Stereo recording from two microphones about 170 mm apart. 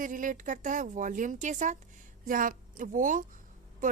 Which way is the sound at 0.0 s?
50° right (ahead or behind).